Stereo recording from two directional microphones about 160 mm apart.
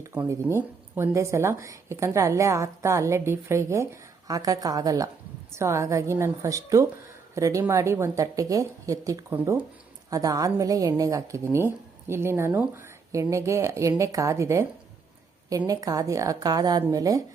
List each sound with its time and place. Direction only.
0.0 s a woman's voice: 15° right (ahead or behind)